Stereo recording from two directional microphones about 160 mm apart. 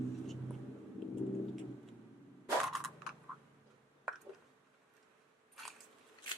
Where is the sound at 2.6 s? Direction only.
Centre (ahead or behind).